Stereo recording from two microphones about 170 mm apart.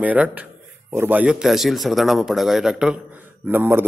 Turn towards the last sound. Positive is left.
turn(degrees=-10)  # may be behind; listen again after turning